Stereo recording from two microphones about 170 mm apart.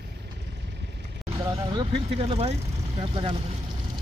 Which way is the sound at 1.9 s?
30° right (ahead or behind).